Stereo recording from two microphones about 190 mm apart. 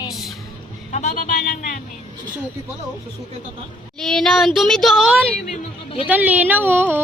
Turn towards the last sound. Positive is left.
turn(degrees=-10)  # may be behind; listen again after turning